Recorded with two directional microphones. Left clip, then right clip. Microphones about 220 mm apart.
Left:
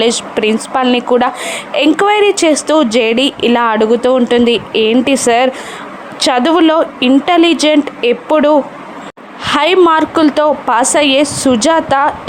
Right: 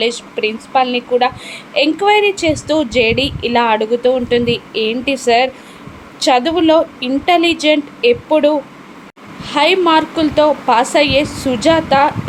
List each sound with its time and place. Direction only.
0.0 s a woman's voice: 25° left (ahead or behind)